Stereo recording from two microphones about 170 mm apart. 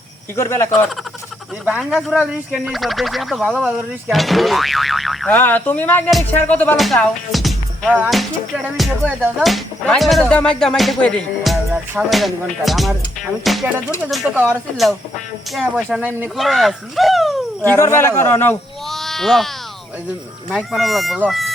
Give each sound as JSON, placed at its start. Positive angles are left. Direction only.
{"t": 0.3, "sound": "speech", "side_deg": 15}
{"t": 1.6, "sound": "speech", "side_deg": -5}
{"t": 5.3, "sound": "speech", "side_deg": 10}
{"t": 6.7, "sound": "speech", "side_deg": 0}
{"t": 15.7, "sound": "speech", "side_deg": -5}
{"t": 17.7, "sound": "speech", "side_deg": 15}
{"t": 18.9, "sound": "a sound", "side_deg": 0}
{"t": 20.5, "sound": "speech", "side_deg": 0}